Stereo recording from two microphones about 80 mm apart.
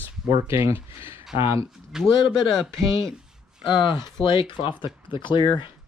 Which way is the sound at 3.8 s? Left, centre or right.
Left.